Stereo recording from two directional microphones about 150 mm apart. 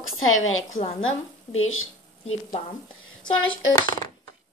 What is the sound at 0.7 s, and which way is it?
Speech, 60° left (ahead or behind).